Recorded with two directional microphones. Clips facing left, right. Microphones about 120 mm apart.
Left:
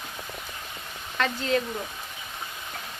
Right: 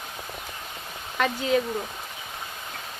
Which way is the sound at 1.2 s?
10° right (ahead or behind).